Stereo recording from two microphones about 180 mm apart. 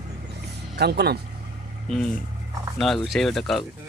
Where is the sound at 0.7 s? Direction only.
65° right (ahead or behind).